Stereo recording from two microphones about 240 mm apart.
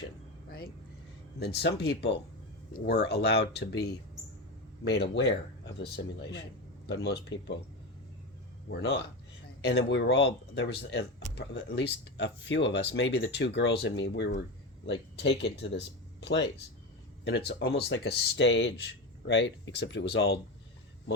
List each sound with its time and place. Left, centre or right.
1.4 s speech: left
8.7 s speech: left